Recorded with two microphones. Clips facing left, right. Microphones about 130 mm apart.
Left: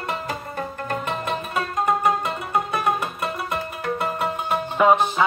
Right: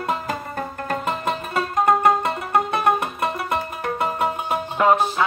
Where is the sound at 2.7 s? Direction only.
25° right (ahead or behind).